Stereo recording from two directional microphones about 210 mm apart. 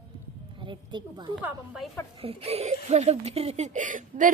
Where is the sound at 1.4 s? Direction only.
5° right (ahead or behind).